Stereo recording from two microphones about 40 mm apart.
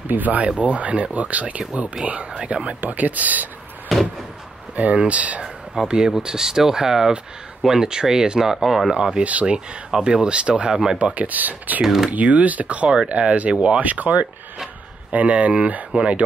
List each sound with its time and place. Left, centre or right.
0.1 s speech: right
2.8 s speech: right
3.9 s a sound: centre
4.7 s speech: right
5.9 s speech: centre
9.2 s speech: right
9.8 s speech: centre
10.7 s speech: centre
11.0 s speech: right
11.8 s speech: centre
12.1 s speech: right
13.8 s speech: right